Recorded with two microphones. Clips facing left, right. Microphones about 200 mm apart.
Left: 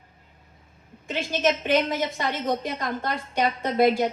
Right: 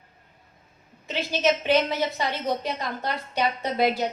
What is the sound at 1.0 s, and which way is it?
A woman's voice, 50° left (ahead or behind).